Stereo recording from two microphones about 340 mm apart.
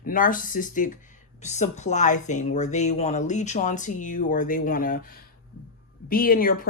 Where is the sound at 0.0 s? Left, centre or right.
Left.